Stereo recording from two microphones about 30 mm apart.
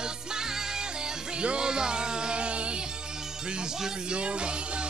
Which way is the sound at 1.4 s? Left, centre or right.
Right.